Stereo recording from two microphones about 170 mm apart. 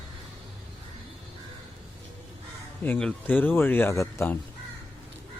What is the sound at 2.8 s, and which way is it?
Speech, 10° left (ahead or behind).